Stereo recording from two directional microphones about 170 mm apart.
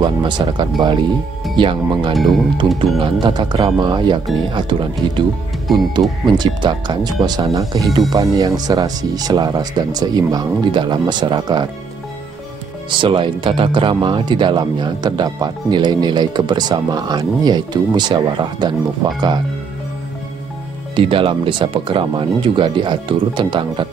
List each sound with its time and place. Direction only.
0.0 s speech: 25° right (ahead or behind)
2.1 s speech: centre (ahead or behind)
2.6 s speech: 30° right (ahead or behind)
12.9 s speech: 30° right (ahead or behind)
20.9 s speech: 30° right (ahead or behind)